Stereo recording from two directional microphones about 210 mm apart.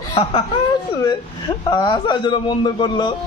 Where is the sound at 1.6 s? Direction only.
20° left (ahead or behind).